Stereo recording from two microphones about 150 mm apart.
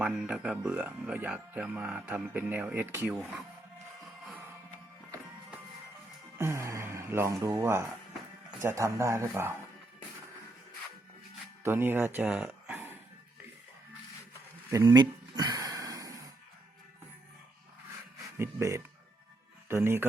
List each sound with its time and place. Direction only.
0.0 s speech: 5° right (ahead or behind)
6.4 s speech: 20° right (ahead or behind)
11.6 s speech: 15° right (ahead or behind)
14.7 s a sound: 25° right (ahead or behind)
18.3 s speech: 20° right (ahead or behind)